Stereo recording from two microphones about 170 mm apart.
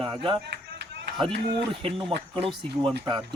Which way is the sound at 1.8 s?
30° right (ahead or behind).